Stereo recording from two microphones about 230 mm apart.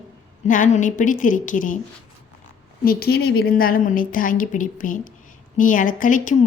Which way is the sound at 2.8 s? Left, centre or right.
Left.